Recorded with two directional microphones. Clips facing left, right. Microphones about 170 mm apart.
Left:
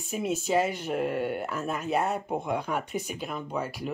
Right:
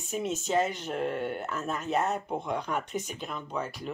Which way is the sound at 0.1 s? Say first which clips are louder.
Left 2 dB; 10° left (ahead or behind).